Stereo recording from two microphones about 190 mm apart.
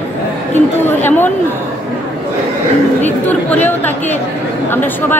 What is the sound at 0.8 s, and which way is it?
Chatter, 10° left (ahead or behind).